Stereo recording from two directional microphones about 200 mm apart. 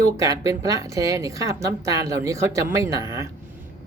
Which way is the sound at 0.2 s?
15° right (ahead or behind).